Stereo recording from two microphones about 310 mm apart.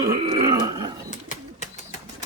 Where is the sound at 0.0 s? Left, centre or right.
Centre.